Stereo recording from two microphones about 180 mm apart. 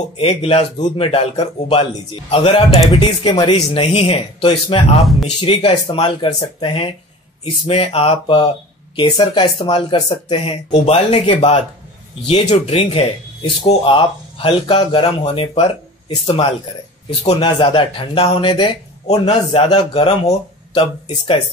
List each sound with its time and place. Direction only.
0.2 s a man's voice: 30° left (ahead or behind)
17.2 s a man's voice: 30° left (ahead or behind)